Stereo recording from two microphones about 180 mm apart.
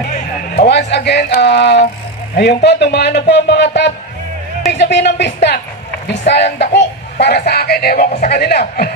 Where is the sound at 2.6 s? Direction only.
70° left (ahead or behind).